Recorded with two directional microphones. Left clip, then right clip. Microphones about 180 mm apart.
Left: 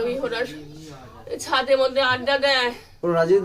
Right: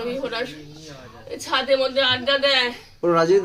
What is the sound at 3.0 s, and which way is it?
Speech, 50° right (ahead or behind).